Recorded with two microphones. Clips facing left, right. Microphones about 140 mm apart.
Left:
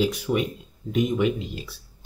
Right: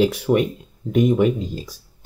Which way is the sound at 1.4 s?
35° right (ahead or behind).